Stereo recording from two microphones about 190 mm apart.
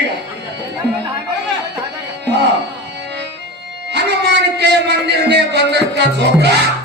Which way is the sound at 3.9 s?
60° right (ahead or behind).